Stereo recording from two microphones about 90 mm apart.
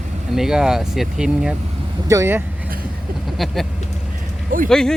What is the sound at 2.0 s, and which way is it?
Speech, 30° right (ahead or behind).